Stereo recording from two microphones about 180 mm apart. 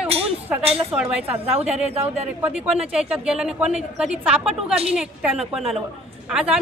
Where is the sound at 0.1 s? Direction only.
35° right (ahead or behind).